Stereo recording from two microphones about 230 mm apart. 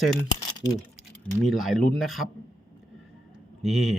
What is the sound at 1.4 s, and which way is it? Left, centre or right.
Speech, centre.